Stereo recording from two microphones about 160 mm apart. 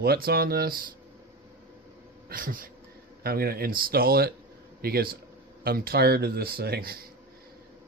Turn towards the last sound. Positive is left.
turn(degrees=-75)  # may be behind; listen again after turning